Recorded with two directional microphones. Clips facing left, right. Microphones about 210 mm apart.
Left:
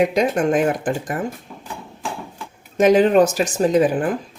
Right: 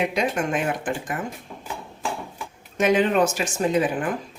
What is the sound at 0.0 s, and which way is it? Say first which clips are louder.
Speech: left 6 dB; 40° left (ahead or behind).